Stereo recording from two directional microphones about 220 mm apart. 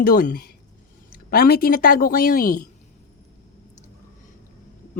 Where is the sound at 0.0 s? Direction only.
40° left (ahead or behind).